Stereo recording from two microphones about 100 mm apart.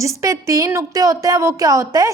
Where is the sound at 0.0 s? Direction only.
35° right (ahead or behind).